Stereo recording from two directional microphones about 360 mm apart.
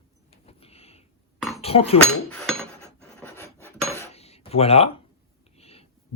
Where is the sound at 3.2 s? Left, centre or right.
Centre.